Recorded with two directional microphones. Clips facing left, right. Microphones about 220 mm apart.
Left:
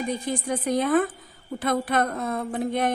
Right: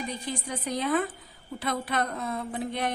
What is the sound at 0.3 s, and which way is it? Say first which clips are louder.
A woman's voice: left 7 dB; 50° left (ahead or behind).